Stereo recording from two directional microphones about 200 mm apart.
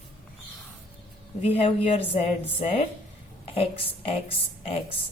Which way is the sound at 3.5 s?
25° left (ahead or behind).